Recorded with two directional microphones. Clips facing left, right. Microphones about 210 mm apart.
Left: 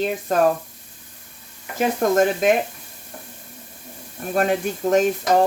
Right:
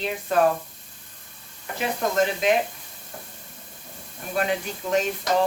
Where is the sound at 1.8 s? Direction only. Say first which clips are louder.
Left 6 dB; 45° left (ahead or behind).